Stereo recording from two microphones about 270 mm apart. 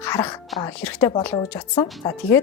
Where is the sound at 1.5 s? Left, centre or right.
Centre.